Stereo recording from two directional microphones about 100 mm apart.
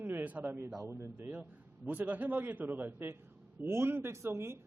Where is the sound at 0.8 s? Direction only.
30° right (ahead or behind).